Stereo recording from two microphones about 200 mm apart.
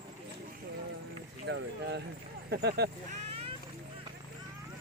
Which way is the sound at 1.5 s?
60° right (ahead or behind).